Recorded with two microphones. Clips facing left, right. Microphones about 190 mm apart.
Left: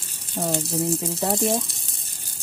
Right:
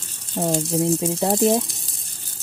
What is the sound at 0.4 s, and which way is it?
Speech, 25° right (ahead or behind).